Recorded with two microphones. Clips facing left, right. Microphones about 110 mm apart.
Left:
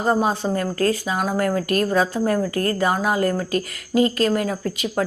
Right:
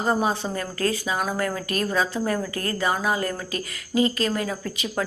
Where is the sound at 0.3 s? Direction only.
40° left (ahead or behind).